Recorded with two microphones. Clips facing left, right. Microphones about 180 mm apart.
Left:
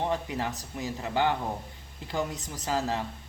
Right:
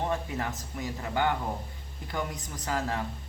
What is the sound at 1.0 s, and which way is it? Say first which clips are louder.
Speech: left 1 dB; 25° left (ahead or behind).